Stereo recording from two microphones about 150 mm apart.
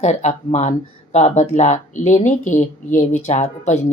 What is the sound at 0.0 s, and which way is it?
Speech, 50° left (ahead or behind).